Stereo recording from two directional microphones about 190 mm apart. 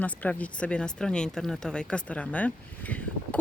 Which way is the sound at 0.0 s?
10° left (ahead or behind).